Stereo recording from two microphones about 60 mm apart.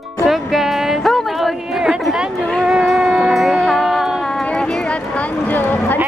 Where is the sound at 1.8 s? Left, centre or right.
Centre.